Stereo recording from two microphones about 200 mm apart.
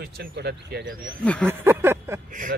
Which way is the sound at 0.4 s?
55° right (ahead or behind).